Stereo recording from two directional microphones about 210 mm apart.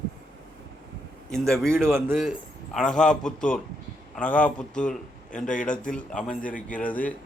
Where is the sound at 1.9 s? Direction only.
10° right (ahead or behind).